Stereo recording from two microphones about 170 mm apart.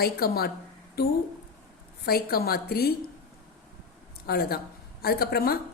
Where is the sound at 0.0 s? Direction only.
65° left (ahead or behind).